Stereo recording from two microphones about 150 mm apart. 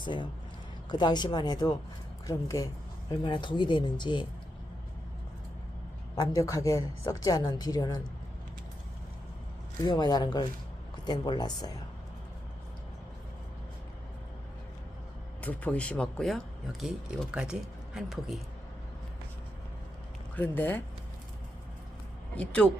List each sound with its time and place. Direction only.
0.0 s a woman's voice: 30° left (ahead or behind)
6.1 s a woman's voice: 25° left (ahead or behind)
9.8 s a woman's voice: 30° left (ahead or behind)
15.4 s speech: 10° left (ahead or behind)
20.3 s speech: 15° left (ahead or behind)
22.4 s speech: 10° left (ahead or behind)